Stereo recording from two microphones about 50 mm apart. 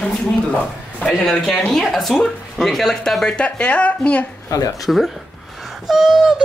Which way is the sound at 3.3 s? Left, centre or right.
Left.